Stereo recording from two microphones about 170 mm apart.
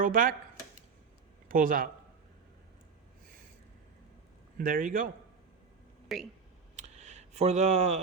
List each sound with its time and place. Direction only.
0.0 s speech: 55° right (ahead or behind)
1.5 s speech: 55° right (ahead or behind)
4.5 s a man's voice: 55° right (ahead or behind)
6.1 s speech: centre (ahead or behind)
6.7 s a sound: 45° right (ahead or behind)